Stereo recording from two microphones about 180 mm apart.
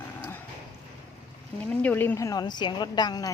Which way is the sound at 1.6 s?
10° left (ahead or behind).